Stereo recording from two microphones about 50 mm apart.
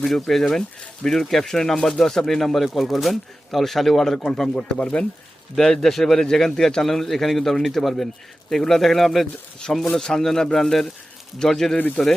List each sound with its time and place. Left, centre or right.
0.0 s a man's voice: centre
5.5 s a man's voice: centre